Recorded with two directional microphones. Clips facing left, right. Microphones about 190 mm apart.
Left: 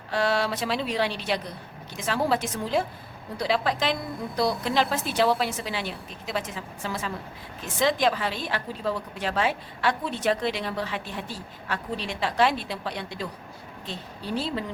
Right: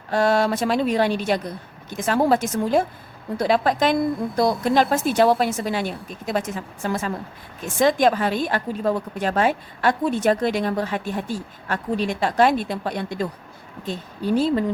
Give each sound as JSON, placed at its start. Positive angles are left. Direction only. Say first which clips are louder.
{"t": 0.1, "sound": "a woman's voice", "louder": "right 6 dB", "side_deg": -45}